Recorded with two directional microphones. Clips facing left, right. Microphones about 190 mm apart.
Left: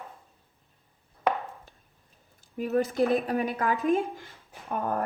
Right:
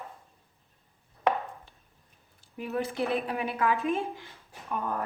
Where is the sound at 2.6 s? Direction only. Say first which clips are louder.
Left 6 dB; 40° left (ahead or behind).